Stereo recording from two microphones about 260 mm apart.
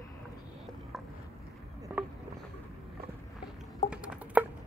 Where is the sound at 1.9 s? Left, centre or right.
Centre.